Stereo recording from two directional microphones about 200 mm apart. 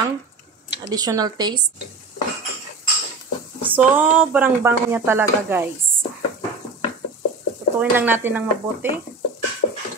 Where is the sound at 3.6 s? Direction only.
10° right (ahead or behind).